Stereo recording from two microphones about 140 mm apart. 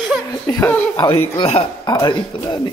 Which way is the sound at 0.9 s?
35° left (ahead or behind).